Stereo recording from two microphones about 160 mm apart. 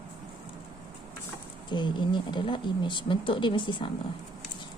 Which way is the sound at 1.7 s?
30° left (ahead or behind).